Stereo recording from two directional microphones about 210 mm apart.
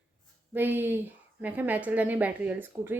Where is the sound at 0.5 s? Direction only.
10° right (ahead or behind).